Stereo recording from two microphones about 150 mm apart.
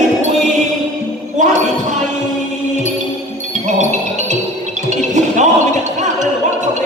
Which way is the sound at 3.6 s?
50° right (ahead or behind).